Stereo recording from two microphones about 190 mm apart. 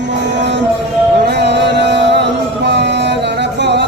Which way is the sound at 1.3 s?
65° right (ahead or behind).